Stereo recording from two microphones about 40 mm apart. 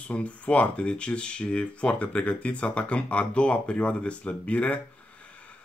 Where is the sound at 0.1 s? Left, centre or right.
Left.